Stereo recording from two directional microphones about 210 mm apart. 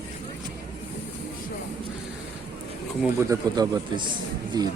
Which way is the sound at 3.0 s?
15° right (ahead or behind).